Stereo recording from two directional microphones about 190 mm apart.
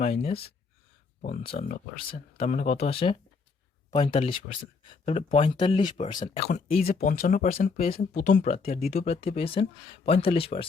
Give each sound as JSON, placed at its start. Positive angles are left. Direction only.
{"t": 0.0, "sound": "speech", "side_deg": 35}
{"t": 1.2, "sound": "speech", "side_deg": 45}
{"t": 6.8, "sound": "speech", "side_deg": 45}